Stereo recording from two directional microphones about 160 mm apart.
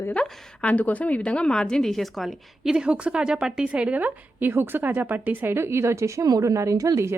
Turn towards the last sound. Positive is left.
turn(degrees=-20)  # may be behind; listen again after turning